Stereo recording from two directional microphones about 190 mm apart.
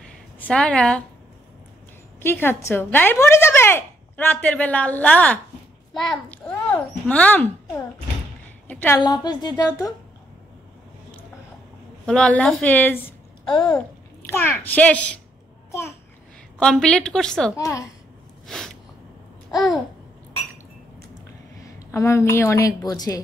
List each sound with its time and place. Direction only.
0.4 s a woman's voice: 5° left (ahead or behind)
2.1 s a child's voice: 10° left (ahead or behind)
12.1 s speech: 5° left (ahead or behind)
13.5 s a woman's voice: 20° left (ahead or behind)
13.7 s a child's voice: 10° left (ahead or behind)
16.5 s a woman's voice: 5° left (ahead or behind)
17.6 s speech: 15° left (ahead or behind)
21.7 s speech: 15° left (ahead or behind)